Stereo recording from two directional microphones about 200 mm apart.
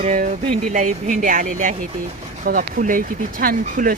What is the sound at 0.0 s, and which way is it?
Speech, 40° right (ahead or behind).